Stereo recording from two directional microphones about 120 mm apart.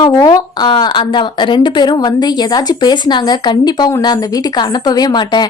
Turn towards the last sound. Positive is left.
turn(degrees=35)  # may be behind; listen again after turning